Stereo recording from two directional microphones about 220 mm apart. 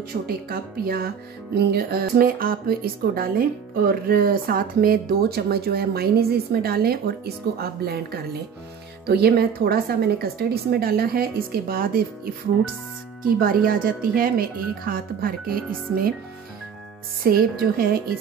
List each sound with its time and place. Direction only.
0.5 s music: 40° right (ahead or behind)
13.4 s speech: 40° right (ahead or behind)
17.2 s music: 45° right (ahead or behind)